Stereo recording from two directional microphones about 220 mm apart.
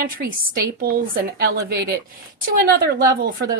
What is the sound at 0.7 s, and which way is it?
A woman's voice, 40° right (ahead or behind).